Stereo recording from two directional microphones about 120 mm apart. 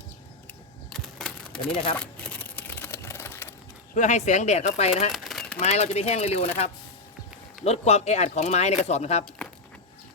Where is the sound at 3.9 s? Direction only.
85° left; by 5.1 s 65° left (ahead or behind).